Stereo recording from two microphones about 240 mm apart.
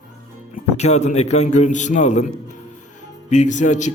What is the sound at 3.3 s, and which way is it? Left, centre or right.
Speech, left.